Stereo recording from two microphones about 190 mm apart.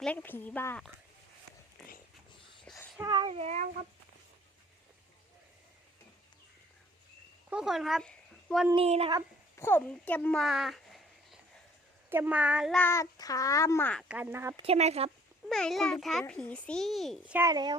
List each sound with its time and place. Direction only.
0.0 s a child's voice: 10° left (ahead or behind)
2.7 s a sound: 5° left (ahead or behind)
3.0 s child singing: 25° right (ahead or behind)
7.5 s speech: centre (ahead or behind)
8.7 s child singing: 30° right (ahead or behind)
9.6 s speech: 10° left (ahead or behind)
12.8 s a child's voice: 15° left (ahead or behind)
14.1 s speech: 10° right (ahead or behind)
14.6 s child singing: 35° right (ahead or behind)
15.4 s speech: centre (ahead or behind)
17.3 s speech: 20° right (ahead or behind)